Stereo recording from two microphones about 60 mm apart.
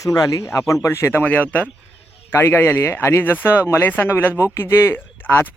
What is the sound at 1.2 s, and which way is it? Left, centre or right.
Speech, left.